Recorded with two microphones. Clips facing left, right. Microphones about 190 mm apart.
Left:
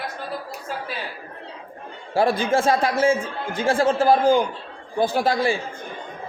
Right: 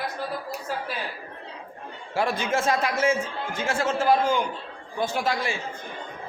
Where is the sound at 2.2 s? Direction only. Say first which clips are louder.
Left 6 dB; 30° left (ahead or behind).